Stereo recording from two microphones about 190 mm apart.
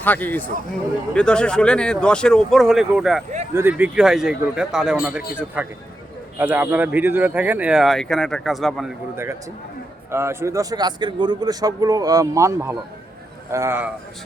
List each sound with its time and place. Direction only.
0.0 s a man's voice: 10° left (ahead or behind)
10.1 s a man's voice: 15° right (ahead or behind)